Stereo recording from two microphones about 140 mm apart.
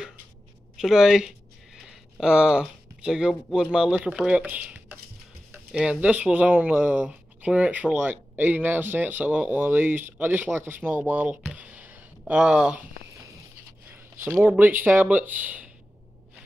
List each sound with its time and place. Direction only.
0.7 s speech: 5° right (ahead or behind)
1.9 s a sound: 5° right (ahead or behind)
3.5 s speech: 5° right (ahead or behind)
14.2 s speech: 15° right (ahead or behind)